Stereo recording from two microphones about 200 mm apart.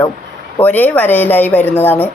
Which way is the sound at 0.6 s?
10° left (ahead or behind).